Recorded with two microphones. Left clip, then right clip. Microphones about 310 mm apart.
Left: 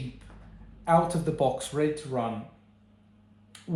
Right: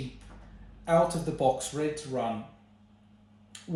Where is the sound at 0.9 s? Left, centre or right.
Centre.